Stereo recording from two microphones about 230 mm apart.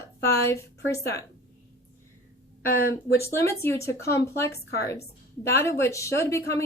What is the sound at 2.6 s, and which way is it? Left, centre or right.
Speech, left.